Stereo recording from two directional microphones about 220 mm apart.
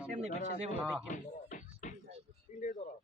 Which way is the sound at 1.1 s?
35° left (ahead or behind).